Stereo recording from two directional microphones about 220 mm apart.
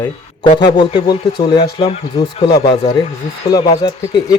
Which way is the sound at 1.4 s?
45° left (ahead or behind).